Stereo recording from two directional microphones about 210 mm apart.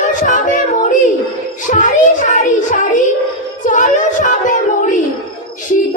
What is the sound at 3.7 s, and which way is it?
Speech, 35° left (ahead or behind).